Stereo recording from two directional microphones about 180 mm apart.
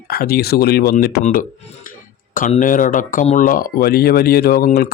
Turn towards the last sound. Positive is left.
turn(degrees=55)  # may be behind; listen again after turning